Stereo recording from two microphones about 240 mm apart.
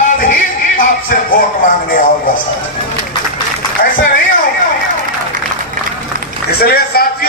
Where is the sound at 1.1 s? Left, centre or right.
Left.